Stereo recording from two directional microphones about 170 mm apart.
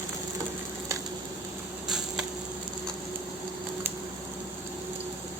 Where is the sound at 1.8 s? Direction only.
Centre (ahead or behind).